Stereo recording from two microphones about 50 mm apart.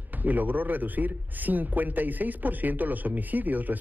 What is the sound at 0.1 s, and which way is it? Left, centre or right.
A man's voice, right.